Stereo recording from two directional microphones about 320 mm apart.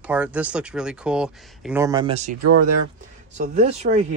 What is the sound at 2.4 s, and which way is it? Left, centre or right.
Speech, right.